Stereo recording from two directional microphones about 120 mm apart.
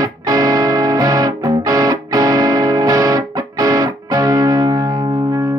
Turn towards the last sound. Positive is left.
turn(degrees=-30)  # may be behind; listen again after turning